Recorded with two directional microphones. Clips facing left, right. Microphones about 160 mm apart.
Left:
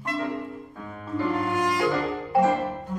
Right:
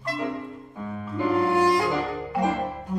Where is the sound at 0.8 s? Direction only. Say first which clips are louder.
Right 1 dB; 10° right (ahead or behind).